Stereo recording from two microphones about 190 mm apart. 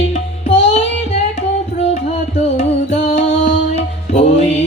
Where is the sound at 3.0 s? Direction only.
35° left (ahead or behind).